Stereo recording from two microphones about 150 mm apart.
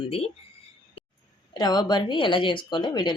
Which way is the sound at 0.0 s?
40° left (ahead or behind).